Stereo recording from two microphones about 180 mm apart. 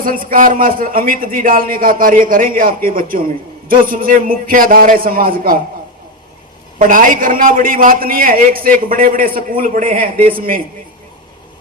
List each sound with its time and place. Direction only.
0.0 s a man's voice: 50° right (ahead or behind)
6.7 s a man's voice: 45° right (ahead or behind)